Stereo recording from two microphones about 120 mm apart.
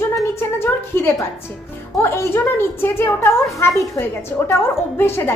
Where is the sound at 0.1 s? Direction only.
20° left (ahead or behind).